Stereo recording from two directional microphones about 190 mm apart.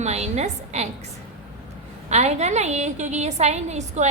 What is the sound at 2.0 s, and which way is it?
A woman's voice, 35° right (ahead or behind).